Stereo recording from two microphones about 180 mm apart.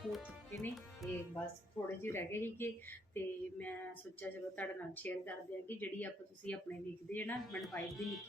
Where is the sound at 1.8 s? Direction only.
15° left (ahead or behind).